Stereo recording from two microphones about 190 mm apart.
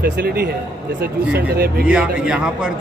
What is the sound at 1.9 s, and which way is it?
Speech, 5° right (ahead or behind).